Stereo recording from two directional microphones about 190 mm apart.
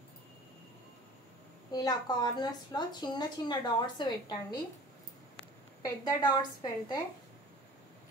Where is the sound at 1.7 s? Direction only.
20° left (ahead or behind).